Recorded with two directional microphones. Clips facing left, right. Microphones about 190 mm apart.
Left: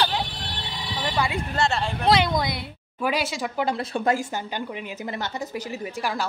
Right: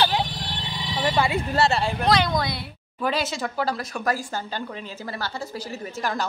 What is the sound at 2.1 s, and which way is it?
A woman's voice, 20° left (ahead or behind).